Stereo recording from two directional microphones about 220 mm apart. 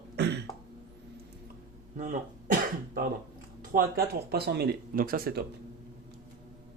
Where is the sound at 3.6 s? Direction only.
40° right (ahead or behind).